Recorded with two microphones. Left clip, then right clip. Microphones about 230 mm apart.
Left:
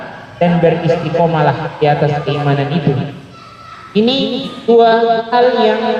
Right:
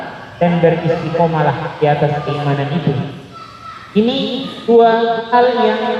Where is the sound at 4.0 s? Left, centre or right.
Left.